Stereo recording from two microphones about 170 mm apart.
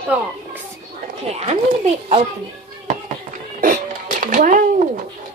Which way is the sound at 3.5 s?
50° right (ahead or behind).